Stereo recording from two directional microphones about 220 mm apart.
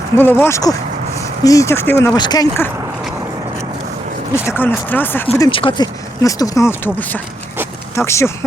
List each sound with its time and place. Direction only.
0.2 s speech: 10° left (ahead or behind)
4.4 s speech: 10° left (ahead or behind)
5.4 s speech: 25° left (ahead or behind)